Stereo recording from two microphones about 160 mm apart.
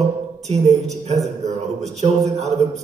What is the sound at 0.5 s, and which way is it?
A man's voice, 45° right (ahead or behind).